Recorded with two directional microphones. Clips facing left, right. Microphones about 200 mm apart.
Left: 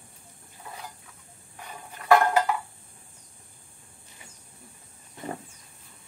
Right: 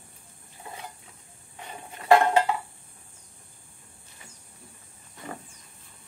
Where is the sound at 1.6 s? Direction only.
25° right (ahead or behind).